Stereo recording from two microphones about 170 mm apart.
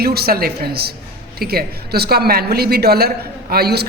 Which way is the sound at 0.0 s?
65° right (ahead or behind).